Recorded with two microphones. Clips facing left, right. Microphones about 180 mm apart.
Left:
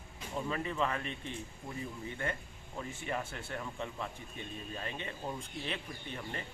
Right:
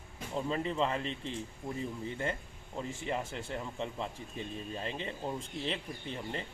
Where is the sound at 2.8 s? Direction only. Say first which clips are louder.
Right 2 dB; 25° right (ahead or behind).